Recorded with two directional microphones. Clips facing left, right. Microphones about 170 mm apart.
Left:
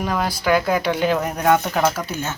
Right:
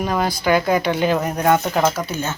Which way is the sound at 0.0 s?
Centre (ahead or behind).